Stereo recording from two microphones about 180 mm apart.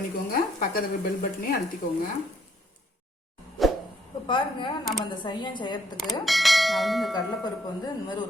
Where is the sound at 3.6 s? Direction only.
Centre (ahead or behind).